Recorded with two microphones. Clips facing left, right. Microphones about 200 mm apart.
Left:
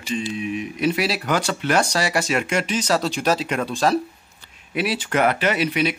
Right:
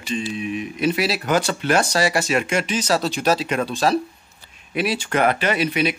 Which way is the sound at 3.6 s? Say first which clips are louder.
Left 1 dB; centre (ahead or behind).